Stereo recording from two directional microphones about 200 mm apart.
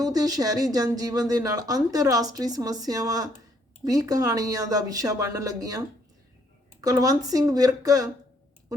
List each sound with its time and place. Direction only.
0.0 s speech: 20° right (ahead or behind)
6.8 s speech: 20° right (ahead or behind)